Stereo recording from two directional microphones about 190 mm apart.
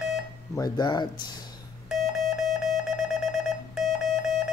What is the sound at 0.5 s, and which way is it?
Speech, 20° left (ahead or behind).